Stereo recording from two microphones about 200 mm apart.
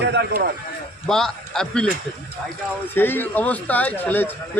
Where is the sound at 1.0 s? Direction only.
5° left (ahead or behind).